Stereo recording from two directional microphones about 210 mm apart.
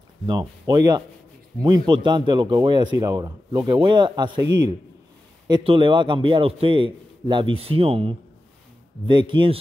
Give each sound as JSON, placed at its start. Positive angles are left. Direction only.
{"t": 0.3, "sound": "speech", "side_deg": -20}